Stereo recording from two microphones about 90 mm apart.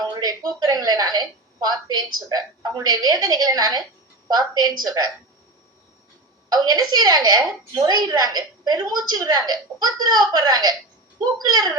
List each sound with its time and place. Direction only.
0.0 s a woman's voice: 50° right (ahead or behind)
6.5 s a woman's voice: 45° right (ahead or behind)